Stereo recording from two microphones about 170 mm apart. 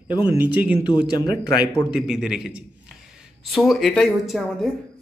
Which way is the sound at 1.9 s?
5° right (ahead or behind).